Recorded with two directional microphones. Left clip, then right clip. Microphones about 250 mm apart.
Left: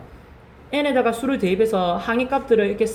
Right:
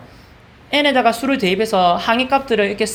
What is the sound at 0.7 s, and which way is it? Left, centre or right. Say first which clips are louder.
Speech: right 5 dB; right.